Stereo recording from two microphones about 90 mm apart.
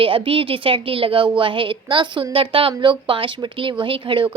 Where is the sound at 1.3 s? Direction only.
70° right (ahead or behind).